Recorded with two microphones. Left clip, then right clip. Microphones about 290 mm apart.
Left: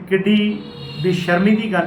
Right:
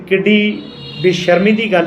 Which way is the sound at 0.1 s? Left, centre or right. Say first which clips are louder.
Right 5 dB; right.